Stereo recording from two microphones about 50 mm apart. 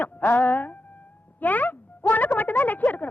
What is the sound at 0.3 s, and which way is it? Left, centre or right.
A woman's voice, left.